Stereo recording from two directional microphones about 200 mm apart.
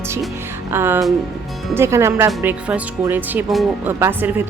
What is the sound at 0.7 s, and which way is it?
Speech, 10° right (ahead or behind).